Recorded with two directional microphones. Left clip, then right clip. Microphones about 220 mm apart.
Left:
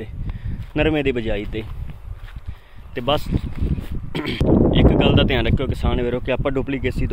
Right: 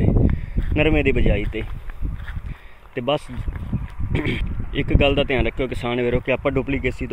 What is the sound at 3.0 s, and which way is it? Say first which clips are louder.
Speech: left 2 dB; 10° left (ahead or behind).